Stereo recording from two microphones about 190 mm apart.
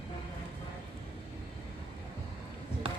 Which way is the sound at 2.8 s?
30° right (ahead or behind).